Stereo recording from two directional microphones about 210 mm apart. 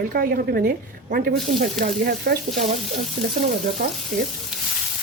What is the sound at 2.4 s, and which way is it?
Speech, centre (ahead or behind).